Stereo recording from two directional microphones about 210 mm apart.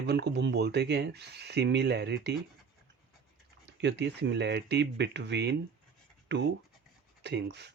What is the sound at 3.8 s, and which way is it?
Speech, 55° right (ahead or behind).